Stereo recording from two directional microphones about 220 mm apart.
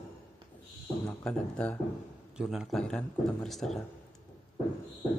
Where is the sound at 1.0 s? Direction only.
5° left (ahead or behind).